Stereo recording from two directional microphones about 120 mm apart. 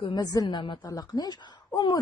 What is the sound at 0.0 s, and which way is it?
A woman's voice, 35° left (ahead or behind).